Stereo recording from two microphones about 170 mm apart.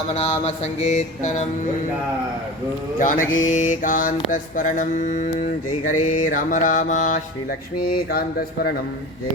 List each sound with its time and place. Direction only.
0.1 s mantra: 35° left (ahead or behind)
3.0 s mantra: 50° left (ahead or behind)